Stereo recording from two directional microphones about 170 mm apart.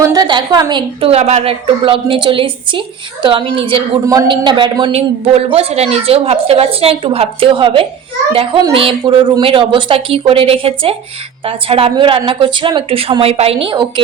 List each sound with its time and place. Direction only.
0.0 s a woman's voice: 20° right (ahead or behind)
4.0 s a man's voice: 20° right (ahead or behind)